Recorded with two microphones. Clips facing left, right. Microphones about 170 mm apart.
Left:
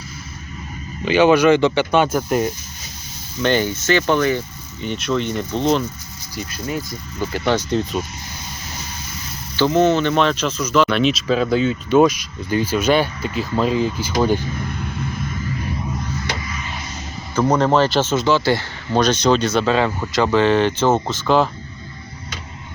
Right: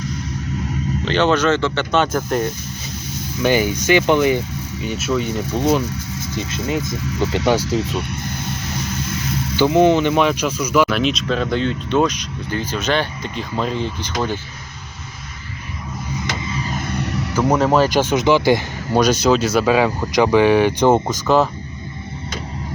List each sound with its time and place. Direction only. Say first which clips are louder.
1.0 s speech: left 4 dB; 10° left (ahead or behind)
3.4 s speech: right 1 dB; 10° right (ahead or behind)
4.9 s speech: even; 5° right (ahead or behind)
6.7 s speech: right 6 dB; 80° right
9.6 s speech: right 2 dB; 15° right (ahead or behind); by 14.3 s 10° left (ahead or behind)
16.9 s music: right 9 dB; 65° right (ahead or behind)
17.3 s speech: even; 10° right (ahead or behind)
21.2 s speech: even; centre (ahead or behind)